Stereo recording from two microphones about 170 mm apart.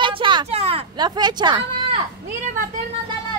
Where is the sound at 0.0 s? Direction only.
30° right (ahead or behind).